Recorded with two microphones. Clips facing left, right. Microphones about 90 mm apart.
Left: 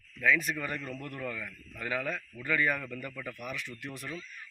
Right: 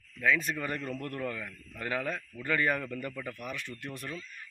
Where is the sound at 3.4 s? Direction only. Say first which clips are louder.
Even; 15° left (ahead or behind).